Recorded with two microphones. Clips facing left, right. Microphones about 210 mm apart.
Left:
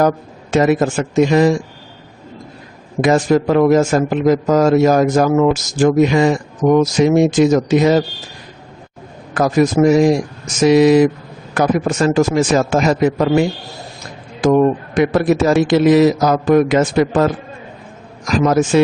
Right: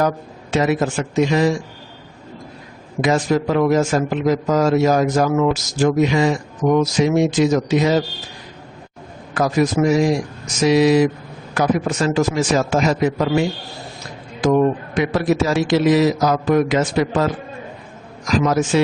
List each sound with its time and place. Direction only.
0.5 s a man's voice: 50° left (ahead or behind)
3.0 s a man's voice: 50° left (ahead or behind)
9.3 s a man's voice: 50° left (ahead or behind)
14.4 s a man's voice: 50° left (ahead or behind)
18.3 s a man's voice: 50° left (ahead or behind)